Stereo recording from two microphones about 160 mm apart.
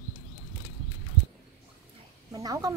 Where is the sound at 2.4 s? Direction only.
20° right (ahead or behind).